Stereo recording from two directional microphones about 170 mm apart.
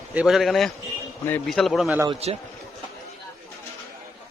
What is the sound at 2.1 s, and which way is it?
Speech, 35° right (ahead or behind).